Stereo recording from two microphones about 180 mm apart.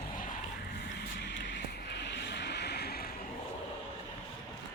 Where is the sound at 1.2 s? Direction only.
80° left; by 3.0 s 60° left (ahead or behind).